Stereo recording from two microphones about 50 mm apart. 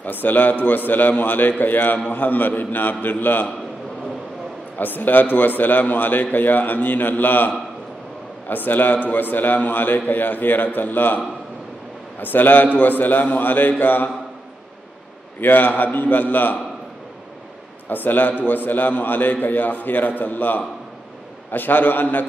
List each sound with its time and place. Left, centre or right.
0.0 s a man's voice: left
4.7 s a man's voice: left
12.2 s a man's voice: left
15.4 s a man's voice: left
17.8 s a man's voice: left